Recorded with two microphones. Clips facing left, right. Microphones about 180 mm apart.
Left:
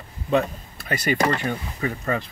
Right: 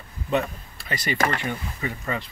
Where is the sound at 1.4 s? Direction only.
45° left (ahead or behind).